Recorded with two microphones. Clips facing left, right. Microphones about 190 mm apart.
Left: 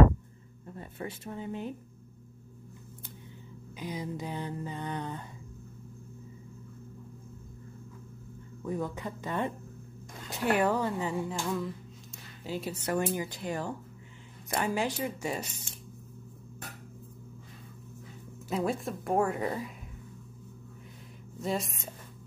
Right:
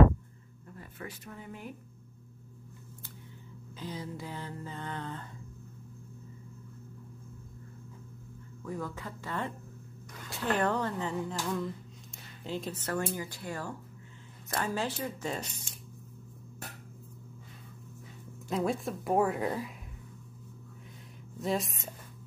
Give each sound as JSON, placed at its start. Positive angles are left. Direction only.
{"t": 0.7, "sound": "speech", "side_deg": 25}
{"t": 3.7, "sound": "music", "side_deg": 15}
{"t": 8.6, "sound": "speech", "side_deg": 20}
{"t": 10.3, "sound": "music", "side_deg": 10}
{"t": 11.4, "sound": "a woman's voice", "side_deg": 5}
{"t": 12.4, "sound": "music", "side_deg": 10}
{"t": 18.5, "sound": "a woman's voice", "side_deg": 0}
{"t": 21.4, "sound": "a woman's voice", "side_deg": 0}